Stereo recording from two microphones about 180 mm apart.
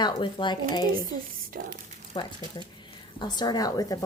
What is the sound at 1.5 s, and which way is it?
Speech, 50° right (ahead or behind).